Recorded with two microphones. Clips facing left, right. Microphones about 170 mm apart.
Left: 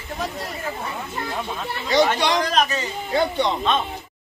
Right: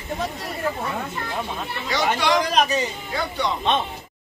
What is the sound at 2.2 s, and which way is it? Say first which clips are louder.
Speech: right 1 dB; 20° left (ahead or behind).